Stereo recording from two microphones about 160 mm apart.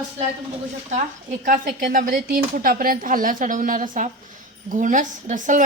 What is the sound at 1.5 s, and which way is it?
A woman's voice, 60° right (ahead or behind).